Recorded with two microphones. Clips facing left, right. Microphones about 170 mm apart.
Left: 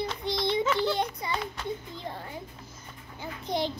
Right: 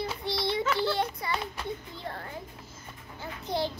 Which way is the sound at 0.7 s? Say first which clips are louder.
Left 1 dB; 20° left (ahead or behind).